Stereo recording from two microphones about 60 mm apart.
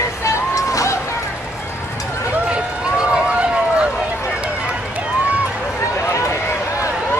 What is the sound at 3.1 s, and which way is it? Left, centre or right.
Run, centre.